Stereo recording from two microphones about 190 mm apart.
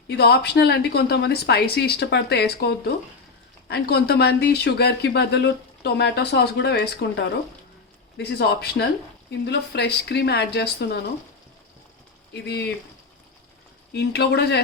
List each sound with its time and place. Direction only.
0.1 s speech: 60° left (ahead or behind)
12.3 s speech: 65° left (ahead or behind)
13.9 s speech: 60° left (ahead or behind)